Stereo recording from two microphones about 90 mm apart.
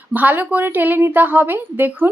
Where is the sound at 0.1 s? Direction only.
20° right (ahead or behind).